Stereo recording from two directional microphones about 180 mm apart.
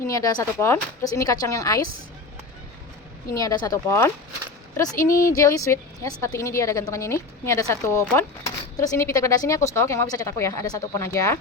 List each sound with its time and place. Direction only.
0.1 s speech: 20° left (ahead or behind)
3.3 s speech: 20° left (ahead or behind)
5.2 s a woman's voice: 15° left (ahead or behind)